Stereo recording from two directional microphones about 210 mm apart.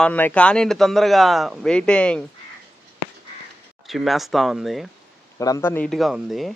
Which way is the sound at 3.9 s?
Centre (ahead or behind).